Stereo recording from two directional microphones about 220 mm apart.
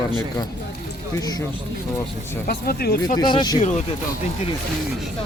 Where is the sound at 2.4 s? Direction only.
45° left (ahead or behind).